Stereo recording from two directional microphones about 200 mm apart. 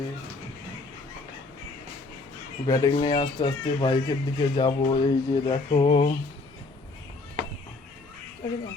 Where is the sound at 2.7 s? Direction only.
20° left (ahead or behind).